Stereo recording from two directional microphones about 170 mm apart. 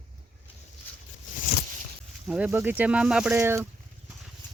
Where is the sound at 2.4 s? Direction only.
10° right (ahead or behind).